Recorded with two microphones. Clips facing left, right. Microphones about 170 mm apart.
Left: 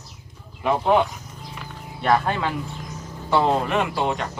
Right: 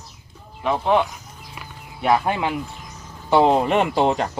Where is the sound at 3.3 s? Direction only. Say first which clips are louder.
Right 4 dB; 20° right (ahead or behind).